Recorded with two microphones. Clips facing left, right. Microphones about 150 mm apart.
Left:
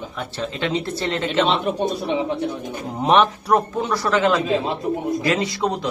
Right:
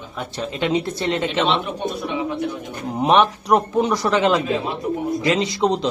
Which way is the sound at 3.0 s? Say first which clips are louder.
Even; 20° right (ahead or behind).